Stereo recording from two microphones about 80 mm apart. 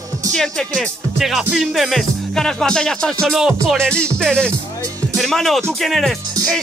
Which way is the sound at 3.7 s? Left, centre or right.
Centre.